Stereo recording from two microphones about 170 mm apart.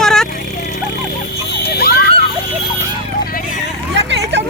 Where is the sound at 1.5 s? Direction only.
70° left (ahead or behind).